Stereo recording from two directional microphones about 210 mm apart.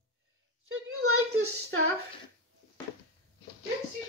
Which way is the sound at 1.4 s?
65° right (ahead or behind).